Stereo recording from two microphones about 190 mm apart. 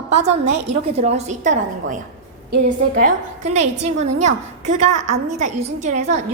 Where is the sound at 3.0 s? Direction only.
40° right (ahead or behind).